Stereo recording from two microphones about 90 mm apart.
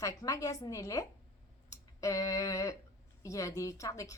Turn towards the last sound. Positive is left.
turn(degrees=40)  # may be behind; listen again after turning